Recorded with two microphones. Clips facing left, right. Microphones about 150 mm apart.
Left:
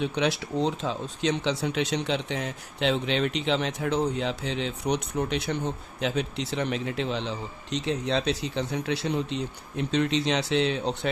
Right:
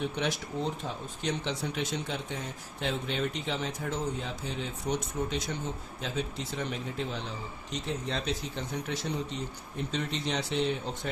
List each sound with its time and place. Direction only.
0.0 s speech: 90° left